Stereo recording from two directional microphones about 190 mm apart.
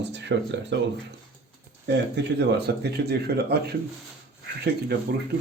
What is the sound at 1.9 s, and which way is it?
Speech, 60° right (ahead or behind).